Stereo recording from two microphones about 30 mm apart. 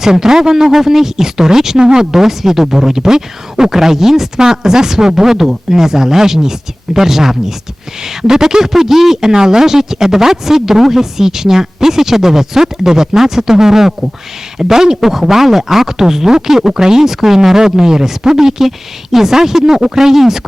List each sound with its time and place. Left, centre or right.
0.0 s speech: centre
2.1 s speech: centre